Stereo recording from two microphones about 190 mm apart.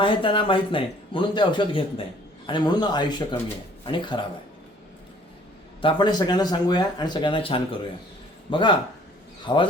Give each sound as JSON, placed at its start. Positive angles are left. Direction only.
{"t": 0.0, "sound": "speech", "side_deg": 25}
{"t": 5.8, "sound": "speech", "side_deg": 25}